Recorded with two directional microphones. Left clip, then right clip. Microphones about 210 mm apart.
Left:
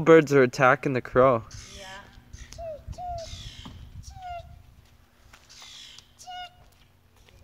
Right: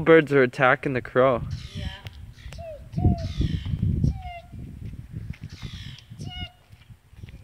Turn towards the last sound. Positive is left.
turn(degrees=-10)  # may be behind; listen again after turning